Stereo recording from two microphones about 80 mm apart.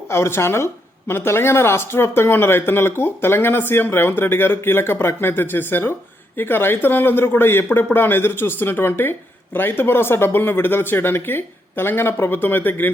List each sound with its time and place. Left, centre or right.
0.1 s speech: left